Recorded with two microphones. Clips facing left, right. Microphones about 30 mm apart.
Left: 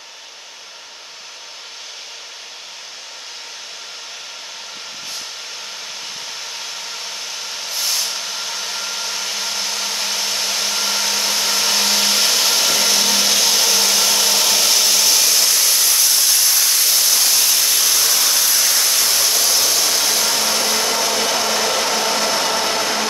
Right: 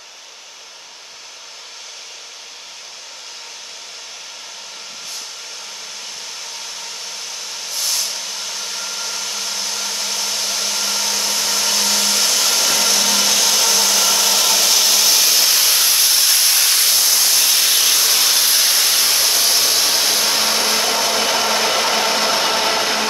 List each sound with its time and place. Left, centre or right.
6.6 s vehicle: centre; by 16.9 s right
16.9 s static: centre
17.4 s a sound: centre
20.3 s hair dryer: centre